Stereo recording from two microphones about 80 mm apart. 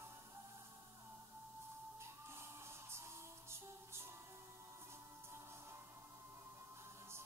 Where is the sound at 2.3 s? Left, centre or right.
Right.